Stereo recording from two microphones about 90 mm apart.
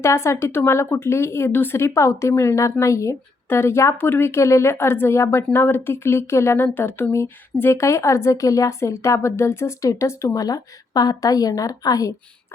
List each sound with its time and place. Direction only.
0.0 s speech: 30° left (ahead or behind)